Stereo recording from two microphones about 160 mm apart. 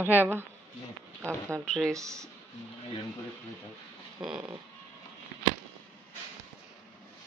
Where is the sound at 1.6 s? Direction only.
5° left (ahead or behind).